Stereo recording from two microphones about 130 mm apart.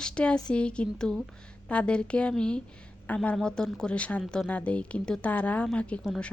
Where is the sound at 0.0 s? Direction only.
10° left (ahead or behind).